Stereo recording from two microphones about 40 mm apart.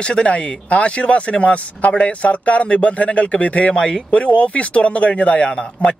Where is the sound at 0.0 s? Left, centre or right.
Left.